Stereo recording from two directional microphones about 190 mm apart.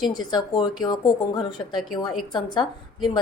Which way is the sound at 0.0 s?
20° left (ahead or behind).